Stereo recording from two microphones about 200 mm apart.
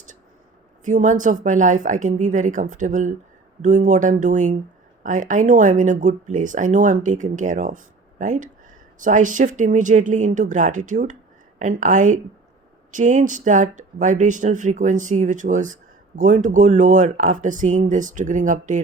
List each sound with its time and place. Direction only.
0.9 s speech: 40° right (ahead or behind)